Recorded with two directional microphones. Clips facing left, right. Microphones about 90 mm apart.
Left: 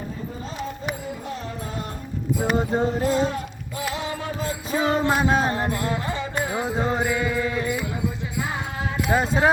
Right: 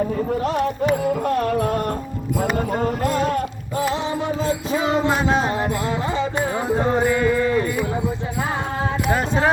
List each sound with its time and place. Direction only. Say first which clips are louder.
0.3 s music: right 11 dB; 70° right (ahead or behind)
2.8 s a sound: right 1 dB; 50° right (ahead or behind)
3.2 s music: right 6 dB; 50° right (ahead or behind)
3.8 s music: right 5 dB; 30° right (ahead or behind)
5.1 s music: right 1 dB; 10° left (ahead or behind)
5.7 s music: right 4 dB; 20° right (ahead or behind)
6.7 s music: right 7 dB; 5° right (ahead or behind)
9.1 s music: left 2 dB; 5° left (ahead or behind)